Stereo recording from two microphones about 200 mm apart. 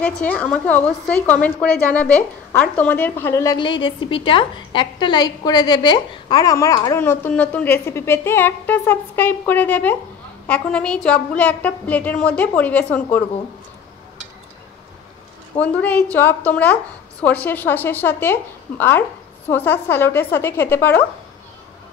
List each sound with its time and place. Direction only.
0.0 s a woman's voice: 5° left (ahead or behind)
15.5 s a woman's voice: 5° left (ahead or behind)